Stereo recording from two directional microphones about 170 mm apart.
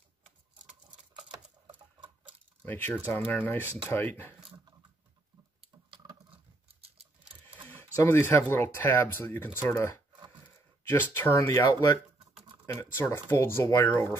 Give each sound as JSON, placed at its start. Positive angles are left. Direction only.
{"t": 1.3, "sound": "typing", "side_deg": -30}
{"t": 2.6, "sound": "speech", "side_deg": 10}
{"t": 5.9, "sound": "patter", "side_deg": -30}
{"t": 7.7, "sound": "speech", "side_deg": 15}